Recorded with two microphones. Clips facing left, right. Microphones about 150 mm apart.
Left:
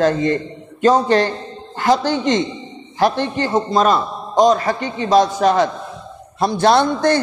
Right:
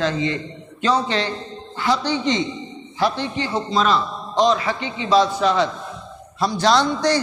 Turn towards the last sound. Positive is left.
turn(degrees=55)  # may be behind; listen again after turning